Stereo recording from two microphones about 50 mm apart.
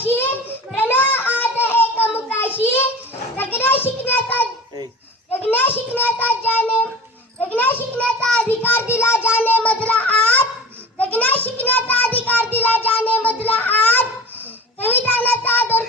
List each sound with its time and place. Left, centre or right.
0.1 s a sound: left
0.8 s child singing: left
1.4 s a sound: left
3.3 s children playing: left
3.8 s child singing: left
5.5 s child singing: left
7.3 s children playing: left
8.0 s child singing: centre
8.4 s child singing: left
8.9 s music: left
9.6 s a sound: left
11.6 s child singing: left